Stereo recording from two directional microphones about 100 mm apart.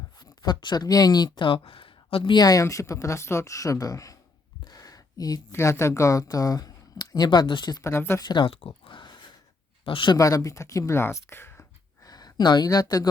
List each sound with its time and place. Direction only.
0.4 s speech: 45° left (ahead or behind); by 2.3 s 60° left (ahead or behind)
2.3 s speech: 40° left (ahead or behind)
4.6 s a sound: 40° left (ahead or behind)
5.5 s speech: 25° left (ahead or behind); by 7.8 s 50° left (ahead or behind)
7.8 s speech: 25° left (ahead or behind)
8.2 s speech: 45° left (ahead or behind)
8.4 s a sound: 65° left (ahead or behind)
9.8 s speech: 60° left (ahead or behind)
10.2 s speech: 35° left (ahead or behind)
12.0 s speech: 40° left (ahead or behind)